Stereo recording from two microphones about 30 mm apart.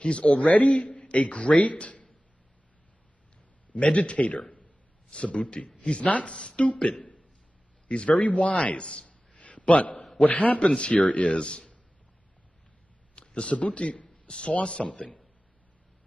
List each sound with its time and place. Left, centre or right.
0.0 s a man's voice: left
3.8 s a man's voice: left
5.8 s a sound: left
6.2 s a man's voice: left
6.6 s a man's voice: left
8.1 s a man's voice: left
8.6 s a man's voice: left
9.3 s a sound: left
10.2 s a man's voice: left
11.3 s a man's voice: left
13.1 s a sound: left
13.7 s a man's voice: left